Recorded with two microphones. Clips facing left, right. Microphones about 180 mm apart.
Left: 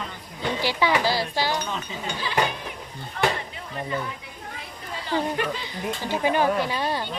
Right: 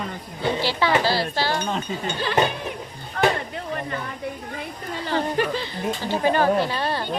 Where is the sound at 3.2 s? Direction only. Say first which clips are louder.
Right 4 dB; 55° right (ahead or behind).